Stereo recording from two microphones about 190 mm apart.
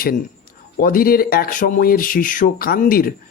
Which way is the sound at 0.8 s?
50° left (ahead or behind).